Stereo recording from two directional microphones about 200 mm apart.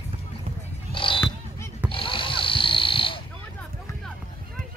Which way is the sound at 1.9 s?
25° left (ahead or behind).